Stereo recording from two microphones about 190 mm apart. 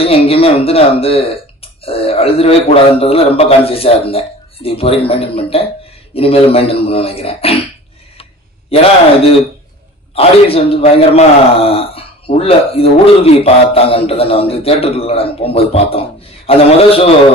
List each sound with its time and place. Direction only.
0.0 s a man's voice: 30° left (ahead or behind)
8.2 s a sound: 30° left (ahead or behind)
10.1 s a man's voice: 30° left (ahead or behind)